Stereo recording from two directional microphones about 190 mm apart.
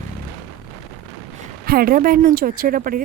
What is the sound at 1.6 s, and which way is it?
A woman's voice, 50° right (ahead or behind).